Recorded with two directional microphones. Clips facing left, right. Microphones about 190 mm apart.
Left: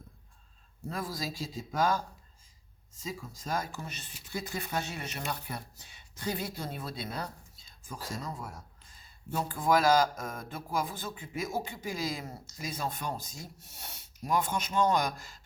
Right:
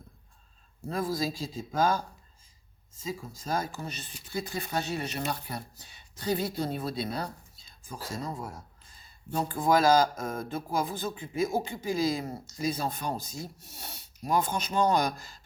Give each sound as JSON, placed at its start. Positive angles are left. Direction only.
{"t": 0.9, "sound": "speech", "side_deg": -30}
{"t": 3.0, "sound": "speech", "side_deg": -30}